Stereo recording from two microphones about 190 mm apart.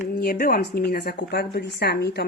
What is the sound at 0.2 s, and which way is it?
Speech, 50° left (ahead or behind).